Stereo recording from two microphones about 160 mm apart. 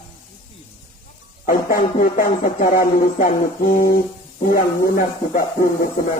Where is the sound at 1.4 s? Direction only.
60° left (ahead or behind).